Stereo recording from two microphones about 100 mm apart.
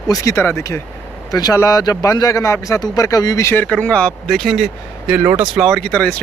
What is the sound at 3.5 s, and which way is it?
Speech, 15° left (ahead or behind).